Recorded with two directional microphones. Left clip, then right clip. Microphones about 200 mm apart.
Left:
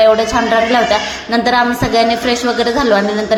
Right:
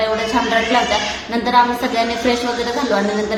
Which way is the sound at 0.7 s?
25° left (ahead or behind).